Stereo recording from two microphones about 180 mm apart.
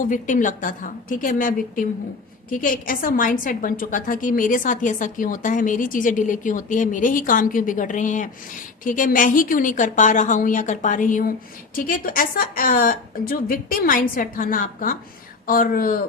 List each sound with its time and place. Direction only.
0.0 s a woman's voice: 45° left (ahead or behind)